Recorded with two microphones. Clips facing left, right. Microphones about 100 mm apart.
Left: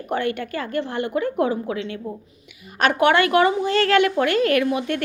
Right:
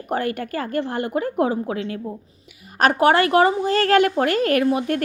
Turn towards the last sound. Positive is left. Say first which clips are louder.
# right 2 dB
turn(degrees=-40)  # may be behind; listen again after turning